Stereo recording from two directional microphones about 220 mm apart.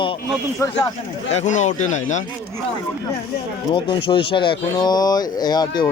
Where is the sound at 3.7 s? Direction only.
20° left (ahead or behind).